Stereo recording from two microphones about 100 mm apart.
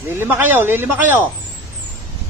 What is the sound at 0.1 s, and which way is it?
Speech, 20° right (ahead or behind).